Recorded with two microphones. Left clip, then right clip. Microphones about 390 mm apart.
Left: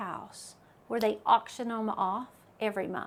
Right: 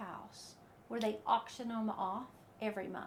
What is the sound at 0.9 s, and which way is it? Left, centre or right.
A woman's voice, left.